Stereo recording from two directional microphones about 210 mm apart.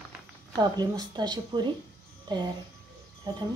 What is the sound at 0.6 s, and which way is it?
Speech, 20° right (ahead or behind).